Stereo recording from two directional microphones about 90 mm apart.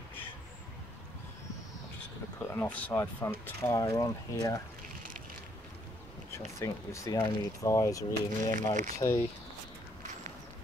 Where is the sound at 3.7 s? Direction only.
40° left (ahead or behind).